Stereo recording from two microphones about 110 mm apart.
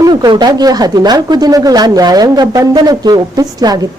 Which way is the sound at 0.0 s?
40° right (ahead or behind).